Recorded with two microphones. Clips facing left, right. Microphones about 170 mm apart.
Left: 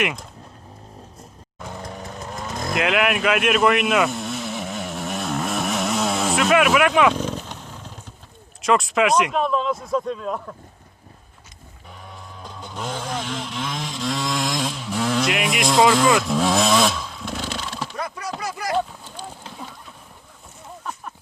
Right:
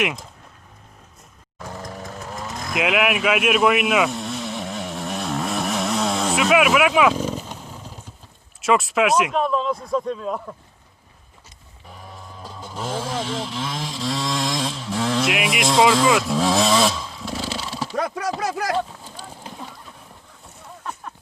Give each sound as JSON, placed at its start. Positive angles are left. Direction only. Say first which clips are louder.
{"t": 0.0, "sound": "speech", "louder": "even", "side_deg": 0}
{"t": 1.5, "sound": "vehicle", "louder": "even", "side_deg": 0}
{"t": 8.6, "sound": "speech", "louder": "even", "side_deg": -5}
{"t": 11.9, "sound": "vehicle", "louder": "right 1 dB", "side_deg": 0}
{"t": 17.9, "sound": "a sound", "louder": "right 6 dB", "side_deg": -85}
{"t": 18.3, "sound": "speech", "louder": "right 4 dB", "side_deg": -90}
{"t": 19.0, "sound": "a sound", "louder": "left 1 dB", "side_deg": -5}